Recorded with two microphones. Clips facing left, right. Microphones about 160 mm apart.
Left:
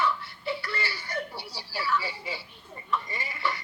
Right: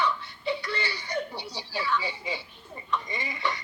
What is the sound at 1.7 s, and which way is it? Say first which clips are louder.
Speech: even; 5° left (ahead or behind).